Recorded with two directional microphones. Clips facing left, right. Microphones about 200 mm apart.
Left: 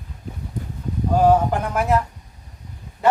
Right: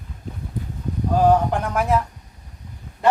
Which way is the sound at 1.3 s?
5° left (ahead or behind).